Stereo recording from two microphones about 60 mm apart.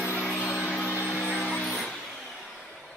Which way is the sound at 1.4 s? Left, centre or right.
Centre.